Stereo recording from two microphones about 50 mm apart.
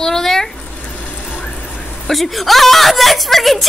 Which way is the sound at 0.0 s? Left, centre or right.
Centre.